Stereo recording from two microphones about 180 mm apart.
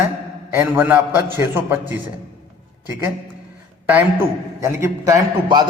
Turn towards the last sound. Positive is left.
turn(degrees=-20)  # may be behind; listen again after turning